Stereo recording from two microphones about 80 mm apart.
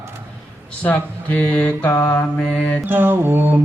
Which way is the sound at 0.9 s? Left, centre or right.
Left.